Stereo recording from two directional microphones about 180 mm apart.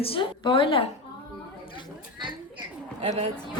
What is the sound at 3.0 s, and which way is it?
Speech, 35° right (ahead or behind).